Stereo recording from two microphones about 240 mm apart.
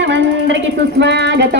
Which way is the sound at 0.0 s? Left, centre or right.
Right.